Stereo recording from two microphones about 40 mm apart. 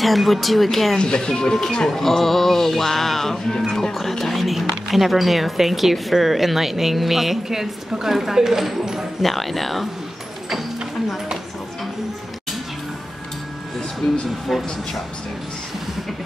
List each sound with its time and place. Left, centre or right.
0.0 s a woman's voice: centre
0.9 s music: centre
3.9 s a woman's voice: centre
9.2 s a woman's voice: centre
14.5 s a woman's voice: centre